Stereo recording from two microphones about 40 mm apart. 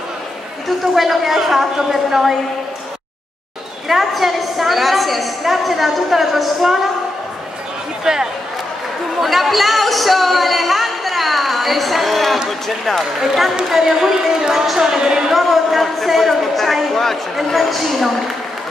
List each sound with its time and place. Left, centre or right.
0.7 s a woman's voice: centre
3.9 s a woman's voice: centre
8.0 s speech: centre
9.2 s a woman's voice: centre
13.7 s a woman's voice: centre